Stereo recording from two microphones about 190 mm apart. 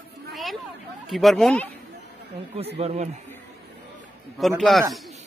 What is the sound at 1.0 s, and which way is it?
Speech, centre (ahead or behind).